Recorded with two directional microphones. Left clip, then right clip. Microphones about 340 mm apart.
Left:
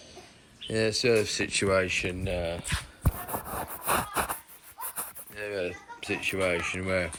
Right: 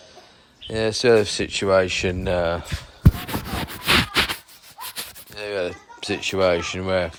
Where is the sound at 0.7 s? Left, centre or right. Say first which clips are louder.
Right 7 dB; centre.